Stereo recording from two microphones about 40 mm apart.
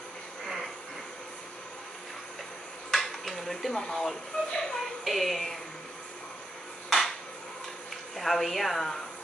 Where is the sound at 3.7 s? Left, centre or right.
Centre.